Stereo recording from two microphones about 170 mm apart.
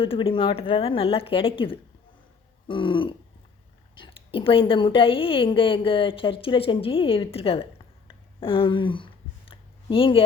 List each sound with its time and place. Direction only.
0.0 s a woman's voice: 30° left (ahead or behind)
2.6 s throat clearing: 30° left (ahead or behind)
3.9 s a woman's voice: 30° left (ahead or behind)
9.5 s a sound: 30° left (ahead or behind)